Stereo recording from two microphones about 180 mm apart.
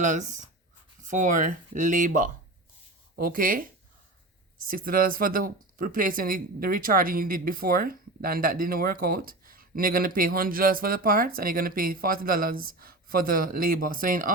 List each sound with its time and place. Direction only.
0.0 s speech: 45° right (ahead or behind)
4.7 s speech: 50° right (ahead or behind)